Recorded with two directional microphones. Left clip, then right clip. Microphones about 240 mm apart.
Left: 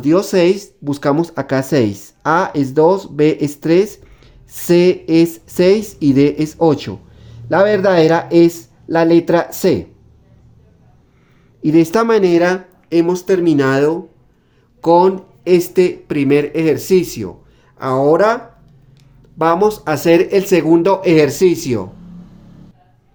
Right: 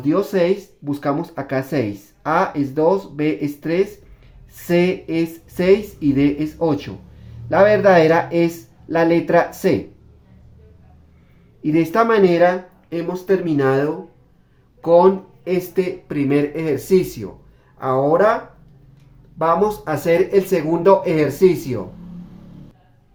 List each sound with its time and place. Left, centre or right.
0.0 s speech: left
11.6 s speech: left
19.4 s speech: left